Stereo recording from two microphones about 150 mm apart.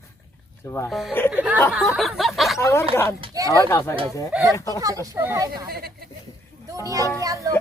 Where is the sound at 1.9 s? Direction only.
Centre (ahead or behind).